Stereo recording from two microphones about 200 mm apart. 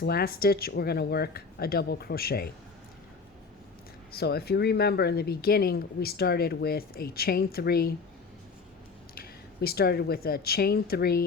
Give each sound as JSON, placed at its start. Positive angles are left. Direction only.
{"t": 0.0, "sound": "speech", "side_deg": 50}
{"t": 4.1, "sound": "speech", "side_deg": 50}
{"t": 9.1, "sound": "speech", "side_deg": 50}